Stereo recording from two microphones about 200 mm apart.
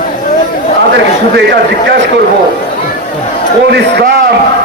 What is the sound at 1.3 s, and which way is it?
Speech, 55° right (ahead or behind).